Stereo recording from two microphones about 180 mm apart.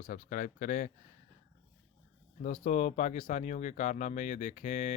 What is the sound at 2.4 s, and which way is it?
Speech, 45° left (ahead or behind).